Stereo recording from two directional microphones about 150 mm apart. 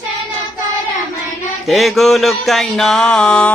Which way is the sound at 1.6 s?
Centre (ahead or behind).